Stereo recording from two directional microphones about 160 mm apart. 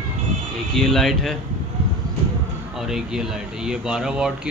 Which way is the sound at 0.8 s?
Centre (ahead or behind).